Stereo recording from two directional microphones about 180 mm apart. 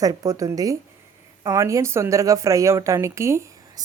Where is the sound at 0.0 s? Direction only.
20° right (ahead or behind).